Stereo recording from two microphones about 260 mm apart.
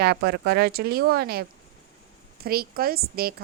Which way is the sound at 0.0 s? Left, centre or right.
Right.